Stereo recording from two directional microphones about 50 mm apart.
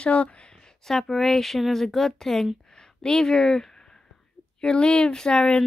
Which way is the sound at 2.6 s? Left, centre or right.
Centre.